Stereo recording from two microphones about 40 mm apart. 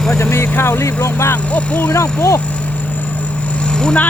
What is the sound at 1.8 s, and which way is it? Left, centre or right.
Speech, left.